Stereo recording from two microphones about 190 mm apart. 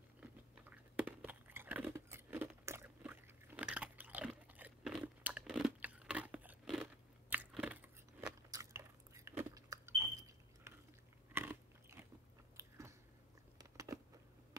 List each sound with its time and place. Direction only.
0.2 s chewing: 5° right (ahead or behind)
8.5 s a sound: 15° right (ahead or behind)
11.3 s biting: 10° right (ahead or behind)